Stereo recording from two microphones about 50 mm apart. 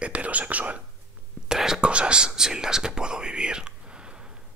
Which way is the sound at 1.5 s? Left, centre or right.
Centre.